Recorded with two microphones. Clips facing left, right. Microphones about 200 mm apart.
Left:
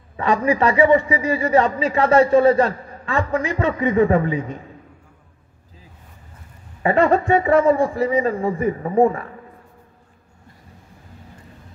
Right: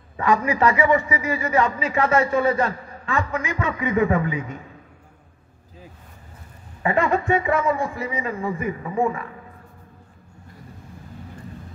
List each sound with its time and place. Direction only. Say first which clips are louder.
0.2 s a man's voice: left 2 dB; 30° left (ahead or behind)
6.8 s a man's voice: left 5 dB; 35° left (ahead or behind)